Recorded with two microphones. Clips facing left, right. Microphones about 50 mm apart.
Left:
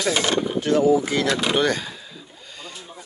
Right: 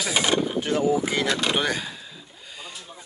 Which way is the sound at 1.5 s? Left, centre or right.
Centre.